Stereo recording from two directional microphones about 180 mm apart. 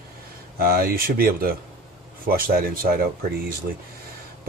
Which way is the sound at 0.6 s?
55° right (ahead or behind).